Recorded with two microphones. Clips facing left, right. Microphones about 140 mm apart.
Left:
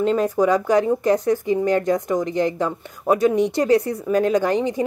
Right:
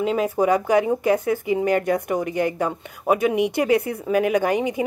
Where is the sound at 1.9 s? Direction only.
60° right (ahead or behind).